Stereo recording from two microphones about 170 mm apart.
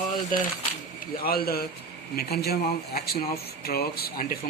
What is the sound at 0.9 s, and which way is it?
Speech, 60° left (ahead or behind).